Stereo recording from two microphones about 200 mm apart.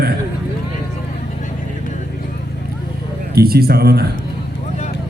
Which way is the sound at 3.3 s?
50° right (ahead or behind).